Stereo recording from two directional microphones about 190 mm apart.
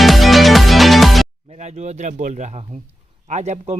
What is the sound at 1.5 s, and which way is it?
Speech, 35° right (ahead or behind).